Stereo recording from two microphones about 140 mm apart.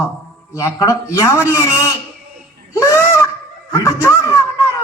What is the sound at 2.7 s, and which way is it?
Honk, 20° left (ahead or behind).